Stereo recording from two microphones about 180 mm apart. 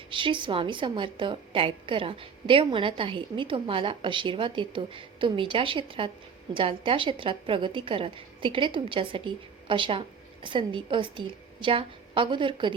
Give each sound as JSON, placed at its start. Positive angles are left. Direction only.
{"t": 0.1, "sound": "a woman's voice", "side_deg": -25}